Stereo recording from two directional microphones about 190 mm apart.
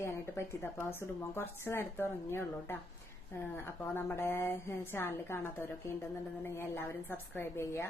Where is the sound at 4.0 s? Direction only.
10° left (ahead or behind).